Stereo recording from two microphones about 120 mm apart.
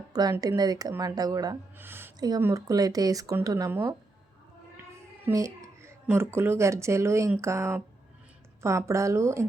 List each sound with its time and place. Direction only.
0.1 s speech: 30° right (ahead or behind)
1.8 s a sound: 20° right (ahead or behind)
2.1 s speech: 30° right (ahead or behind)
5.2 s speech: 25° right (ahead or behind)